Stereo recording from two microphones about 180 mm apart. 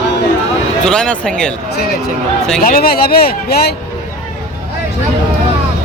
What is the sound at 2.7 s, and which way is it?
Speech, 55° left (ahead or behind).